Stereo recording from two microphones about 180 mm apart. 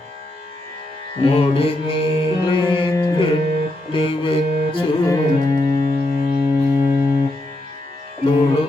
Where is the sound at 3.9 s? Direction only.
30° left (ahead or behind).